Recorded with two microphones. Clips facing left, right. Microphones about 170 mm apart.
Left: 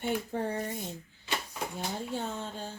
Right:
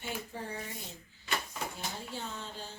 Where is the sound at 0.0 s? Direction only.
60° left (ahead or behind).